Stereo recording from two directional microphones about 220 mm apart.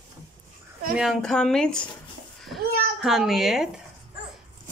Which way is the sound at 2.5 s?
45° right (ahead or behind).